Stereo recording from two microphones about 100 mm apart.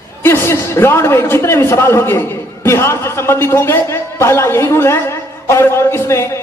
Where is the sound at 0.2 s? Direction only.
25° left (ahead or behind).